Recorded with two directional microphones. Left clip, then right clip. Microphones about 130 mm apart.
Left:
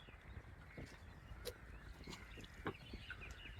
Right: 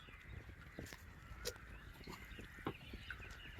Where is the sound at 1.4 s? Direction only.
25° left (ahead or behind).